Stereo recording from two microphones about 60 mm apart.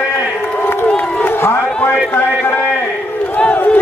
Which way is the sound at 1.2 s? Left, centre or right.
Left.